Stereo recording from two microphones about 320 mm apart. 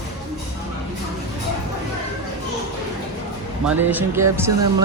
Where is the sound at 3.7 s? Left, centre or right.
Centre.